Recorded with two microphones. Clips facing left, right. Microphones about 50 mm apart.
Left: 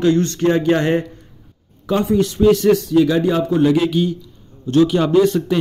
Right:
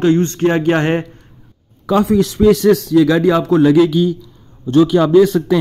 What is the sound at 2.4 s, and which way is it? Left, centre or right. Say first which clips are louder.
Speech: right 2 dB; right.